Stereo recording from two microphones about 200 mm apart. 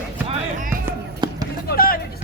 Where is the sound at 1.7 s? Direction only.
45° left (ahead or behind).